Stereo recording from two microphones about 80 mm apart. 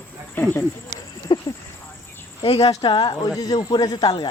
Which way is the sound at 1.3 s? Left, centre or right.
Left.